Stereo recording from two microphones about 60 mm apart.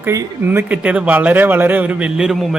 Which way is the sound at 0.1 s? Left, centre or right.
Right.